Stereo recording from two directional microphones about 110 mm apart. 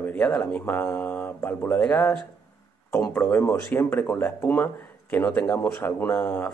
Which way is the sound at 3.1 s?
15° left (ahead or behind).